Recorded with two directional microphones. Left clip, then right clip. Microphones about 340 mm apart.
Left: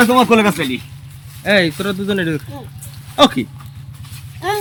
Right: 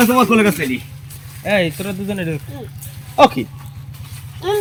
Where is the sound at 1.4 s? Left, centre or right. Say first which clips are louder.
Left 3 dB; centre.